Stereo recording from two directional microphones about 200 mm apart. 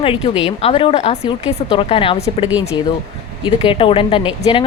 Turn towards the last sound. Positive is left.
turn(degrees=25)  # may be behind; listen again after turning